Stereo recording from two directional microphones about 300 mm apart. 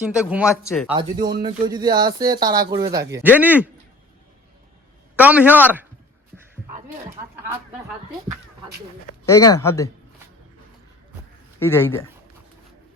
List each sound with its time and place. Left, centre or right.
0.0 s a man's voice: centre
1.3 s a man's voice: centre
5.1 s a man's voice: centre
9.2 s speech: centre
11.6 s speech: centre